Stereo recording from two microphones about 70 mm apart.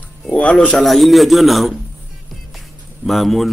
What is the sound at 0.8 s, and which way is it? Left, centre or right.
Speech, centre.